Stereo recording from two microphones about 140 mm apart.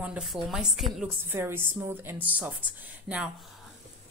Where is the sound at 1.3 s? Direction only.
15° right (ahead or behind).